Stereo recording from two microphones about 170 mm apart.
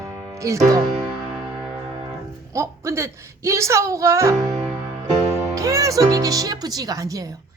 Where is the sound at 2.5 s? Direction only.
15° right (ahead or behind).